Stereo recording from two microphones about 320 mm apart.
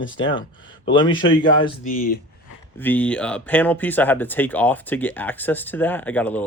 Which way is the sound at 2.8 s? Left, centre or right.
Centre.